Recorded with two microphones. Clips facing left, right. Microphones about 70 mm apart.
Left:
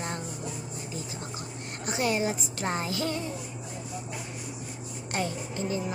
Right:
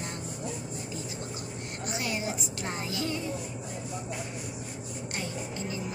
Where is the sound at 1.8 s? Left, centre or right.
Left.